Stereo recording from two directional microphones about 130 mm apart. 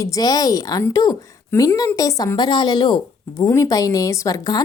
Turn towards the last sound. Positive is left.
turn(degrees=30)  # may be behind; listen again after turning